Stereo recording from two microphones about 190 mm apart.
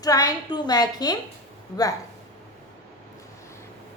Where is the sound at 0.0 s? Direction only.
20° left (ahead or behind).